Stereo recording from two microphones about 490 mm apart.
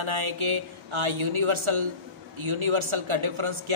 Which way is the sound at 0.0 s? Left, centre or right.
Right.